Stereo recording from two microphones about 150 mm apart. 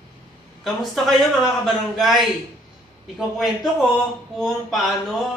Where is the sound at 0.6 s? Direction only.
Centre (ahead or behind).